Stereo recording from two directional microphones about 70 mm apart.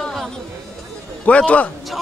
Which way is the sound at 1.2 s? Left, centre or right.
Left.